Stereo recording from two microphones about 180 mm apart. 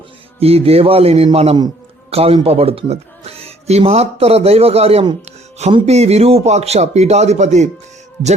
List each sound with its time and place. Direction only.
0.3 s speech: 35° right (ahead or behind)